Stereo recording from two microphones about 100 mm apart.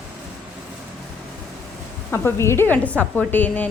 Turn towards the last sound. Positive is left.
turn(degrees=15)  # may be behind; listen again after turning